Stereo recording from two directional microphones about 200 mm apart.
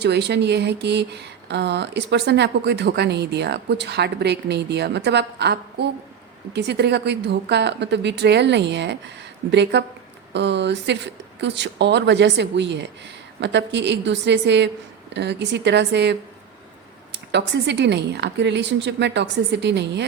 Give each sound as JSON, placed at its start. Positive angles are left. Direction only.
{"t": 0.0, "sound": "speech", "side_deg": -55}